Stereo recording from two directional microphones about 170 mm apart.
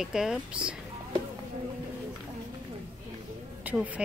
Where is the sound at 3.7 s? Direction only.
10° right (ahead or behind).